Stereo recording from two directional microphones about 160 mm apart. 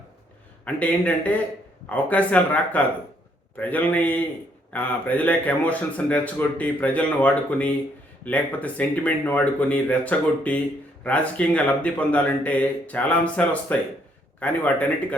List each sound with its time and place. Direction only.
0.6 s a man's voice: 10° left (ahead or behind)